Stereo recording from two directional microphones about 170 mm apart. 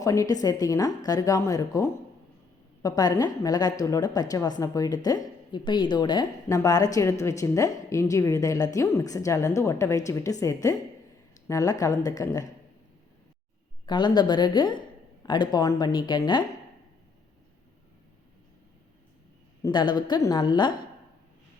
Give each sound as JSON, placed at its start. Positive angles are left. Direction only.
{"t": 0.0, "sound": "a woman's voice", "side_deg": 20}
{"t": 13.8, "sound": "a woman's voice", "side_deg": 25}
{"t": 19.6, "sound": "a woman's voice", "side_deg": 25}